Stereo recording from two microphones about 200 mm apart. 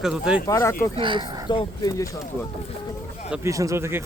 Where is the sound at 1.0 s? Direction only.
25° right (ahead or behind).